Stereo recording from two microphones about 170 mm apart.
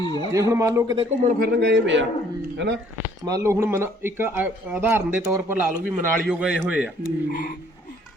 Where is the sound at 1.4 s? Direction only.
90° right.